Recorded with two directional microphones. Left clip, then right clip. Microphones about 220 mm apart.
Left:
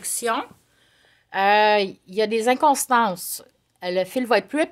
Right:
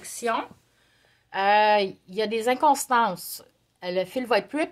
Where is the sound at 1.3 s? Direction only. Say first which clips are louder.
Left 2 dB; 30° left (ahead or behind).